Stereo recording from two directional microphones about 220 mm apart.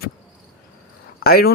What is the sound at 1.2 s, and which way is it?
Speech, 45° left (ahead or behind).